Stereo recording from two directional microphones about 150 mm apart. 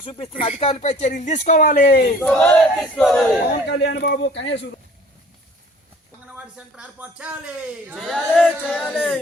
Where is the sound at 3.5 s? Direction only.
90° left.